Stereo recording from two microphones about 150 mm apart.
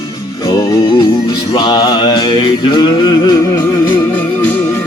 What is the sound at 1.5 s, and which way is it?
Music, 30° left (ahead or behind).